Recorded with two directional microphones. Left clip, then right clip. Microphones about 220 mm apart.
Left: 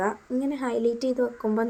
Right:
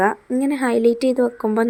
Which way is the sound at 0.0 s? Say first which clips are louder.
Right 8 dB; 35° right (ahead or behind).